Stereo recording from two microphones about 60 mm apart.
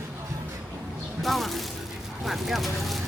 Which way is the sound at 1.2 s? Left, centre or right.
Centre.